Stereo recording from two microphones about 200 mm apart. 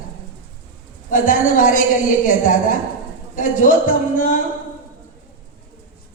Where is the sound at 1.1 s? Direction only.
40° left (ahead or behind).